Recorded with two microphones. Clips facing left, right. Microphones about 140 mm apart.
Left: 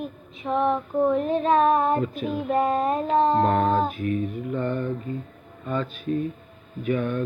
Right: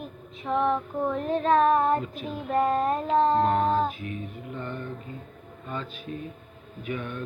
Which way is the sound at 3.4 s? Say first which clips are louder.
Left 2 dB; 55° left (ahead or behind).